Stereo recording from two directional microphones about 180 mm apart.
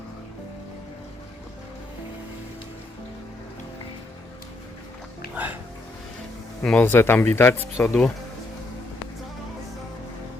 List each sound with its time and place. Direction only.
5.3 s speech: 10° right (ahead or behind)
6.6 s speech: 10° left (ahead or behind)